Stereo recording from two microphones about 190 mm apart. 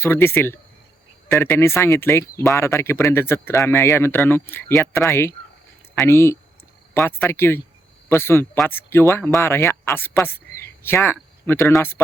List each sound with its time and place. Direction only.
0.0 s speech: 10° left (ahead or behind)